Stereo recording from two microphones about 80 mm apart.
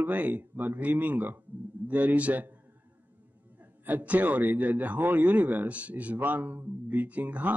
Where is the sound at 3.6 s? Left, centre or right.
Right.